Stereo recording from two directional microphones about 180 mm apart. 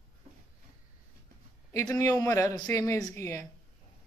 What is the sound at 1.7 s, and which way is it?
A man's voice, 20° left (ahead or behind).